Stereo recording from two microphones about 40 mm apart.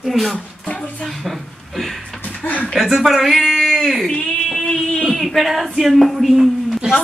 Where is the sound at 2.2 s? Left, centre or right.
Left.